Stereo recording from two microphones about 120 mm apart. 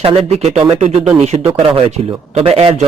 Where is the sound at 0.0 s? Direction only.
60° right (ahead or behind).